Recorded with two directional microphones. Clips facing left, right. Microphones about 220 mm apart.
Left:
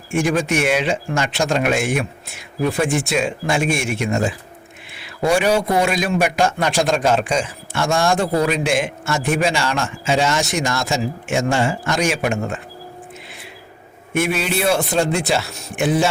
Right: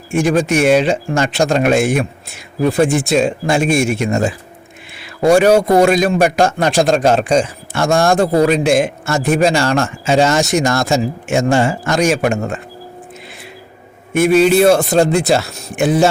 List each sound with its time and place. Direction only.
0.1 s a man's voice: 35° right (ahead or behind)
5.3 s a man's voice: 45° right (ahead or behind)
14.1 s a man's voice: 40° right (ahead or behind)